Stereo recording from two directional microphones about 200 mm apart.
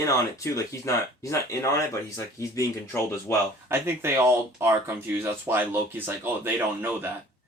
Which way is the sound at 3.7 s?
10° right (ahead or behind).